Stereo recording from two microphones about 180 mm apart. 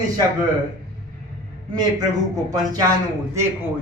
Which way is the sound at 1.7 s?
20° right (ahead or behind).